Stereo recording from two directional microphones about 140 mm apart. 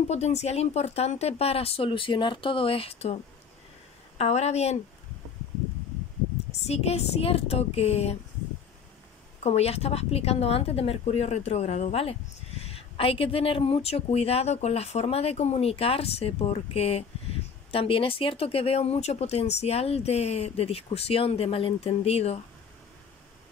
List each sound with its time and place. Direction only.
0.1 s speech: 50° left (ahead or behind)
4.2 s speech: 50° left (ahead or behind)
6.5 s speech: 50° left (ahead or behind)
9.4 s speech: 50° left (ahead or behind)